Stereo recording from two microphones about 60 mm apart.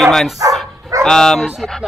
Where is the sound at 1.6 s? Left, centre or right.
Centre.